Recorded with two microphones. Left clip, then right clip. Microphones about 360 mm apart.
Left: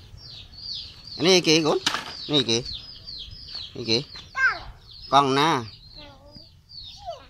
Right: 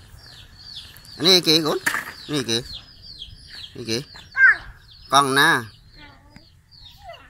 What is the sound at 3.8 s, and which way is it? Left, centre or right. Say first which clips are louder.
Speech: left 3 dB; centre.